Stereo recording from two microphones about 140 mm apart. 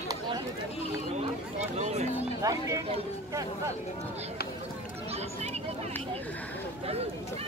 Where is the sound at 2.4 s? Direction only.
25° right (ahead or behind).